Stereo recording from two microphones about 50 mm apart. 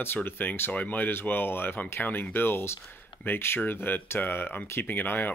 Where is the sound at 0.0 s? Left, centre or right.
Left.